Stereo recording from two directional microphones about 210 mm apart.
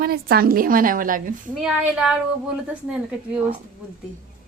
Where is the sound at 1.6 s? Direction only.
5° right (ahead or behind).